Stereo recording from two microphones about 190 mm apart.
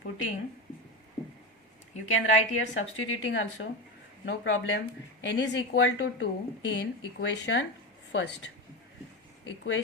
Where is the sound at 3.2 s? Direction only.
85° left.